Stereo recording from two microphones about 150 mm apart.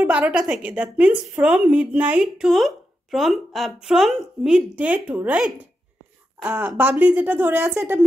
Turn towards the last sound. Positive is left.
turn(degrees=-15)  # may be behind; listen again after turning